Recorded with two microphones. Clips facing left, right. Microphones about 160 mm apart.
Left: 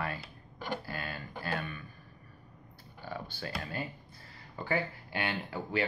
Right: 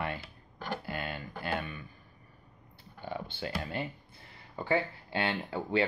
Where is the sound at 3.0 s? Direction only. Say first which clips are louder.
Right 3 dB; 20° right (ahead or behind).